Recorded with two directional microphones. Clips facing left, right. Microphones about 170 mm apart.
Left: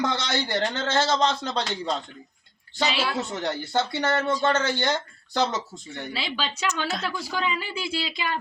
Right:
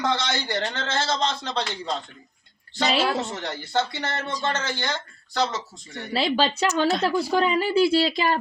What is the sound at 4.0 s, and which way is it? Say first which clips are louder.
Speech: left 6 dB; 40° left (ahead or behind).